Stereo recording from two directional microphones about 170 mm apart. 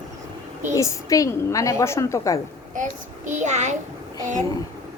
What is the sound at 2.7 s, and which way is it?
A child's voice, 50° right (ahead or behind).